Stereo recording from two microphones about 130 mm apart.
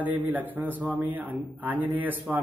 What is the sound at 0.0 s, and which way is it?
A man's voice, 15° right (ahead or behind).